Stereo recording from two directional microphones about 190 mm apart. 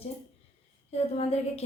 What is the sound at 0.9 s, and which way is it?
Speech, 35° left (ahead or behind).